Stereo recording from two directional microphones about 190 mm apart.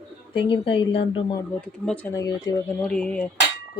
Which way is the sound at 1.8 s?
10° left (ahead or behind).